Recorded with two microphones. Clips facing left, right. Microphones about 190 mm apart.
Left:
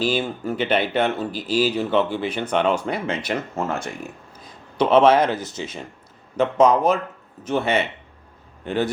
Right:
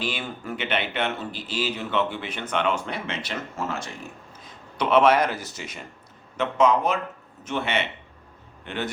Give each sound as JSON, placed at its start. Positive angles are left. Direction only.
{"t": 0.0, "sound": "speech", "side_deg": 30}
{"t": 4.8, "sound": "speech", "side_deg": 30}
{"t": 6.3, "sound": "speech", "side_deg": 40}